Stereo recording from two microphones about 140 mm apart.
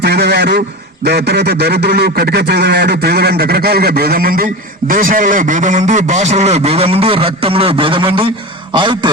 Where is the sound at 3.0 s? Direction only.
90° right.